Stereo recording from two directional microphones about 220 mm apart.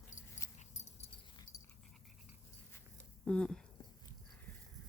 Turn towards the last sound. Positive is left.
turn(degrees=5)  # may be behind; listen again after turning